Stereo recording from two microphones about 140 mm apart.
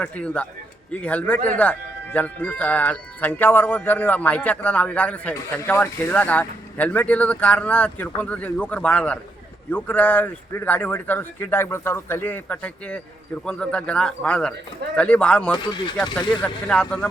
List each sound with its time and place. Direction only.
0.0 s a man's voice: 10° left (ahead or behind)
15.5 s speech: 30° left (ahead or behind)
16.4 s a man's voice: 5° left (ahead or behind)